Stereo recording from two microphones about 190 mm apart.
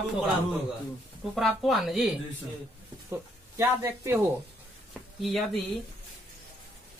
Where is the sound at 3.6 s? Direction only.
15° right (ahead or behind).